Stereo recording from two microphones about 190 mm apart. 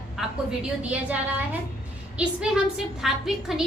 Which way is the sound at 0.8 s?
5° right (ahead or behind).